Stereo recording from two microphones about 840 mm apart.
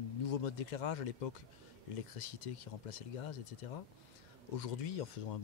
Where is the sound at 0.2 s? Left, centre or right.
Left.